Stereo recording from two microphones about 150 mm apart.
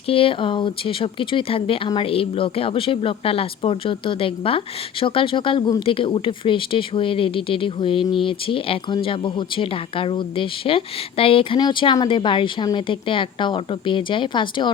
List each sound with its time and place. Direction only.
0.1 s speech: 35° left (ahead or behind)